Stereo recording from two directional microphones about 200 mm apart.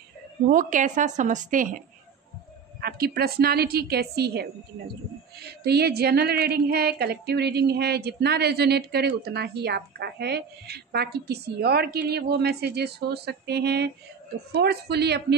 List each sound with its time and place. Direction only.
0.5 s a woman's voice: 40° right (ahead or behind)
2.8 s speech: 50° right (ahead or behind)